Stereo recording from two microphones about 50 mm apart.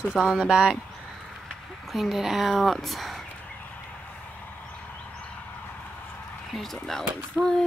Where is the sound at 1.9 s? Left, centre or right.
Centre.